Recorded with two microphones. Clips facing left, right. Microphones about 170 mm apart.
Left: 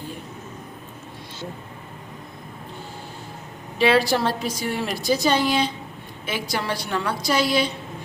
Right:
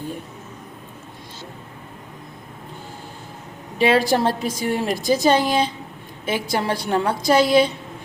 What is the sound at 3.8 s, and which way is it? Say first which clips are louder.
A woman's voice: right 2 dB; 45° right (ahead or behind).